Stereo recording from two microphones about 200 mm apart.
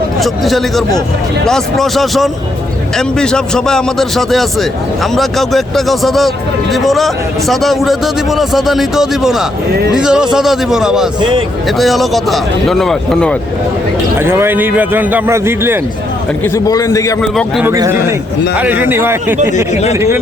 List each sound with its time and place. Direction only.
0.2 s a man's voice: centre (ahead or behind)
11.2 s speech: 25° right (ahead or behind)
11.8 s a man's voice: centre (ahead or behind)
14.2 s a man's voice: 10° right (ahead or behind)
16.4 s a man's voice: 15° left (ahead or behind)
17.2 s a man's voice: centre (ahead or behind)
17.7 s a man's voice: 10° right (ahead or behind)
19.7 s speech: 30° left (ahead or behind)
20.0 s a man's voice: 15° right (ahead or behind)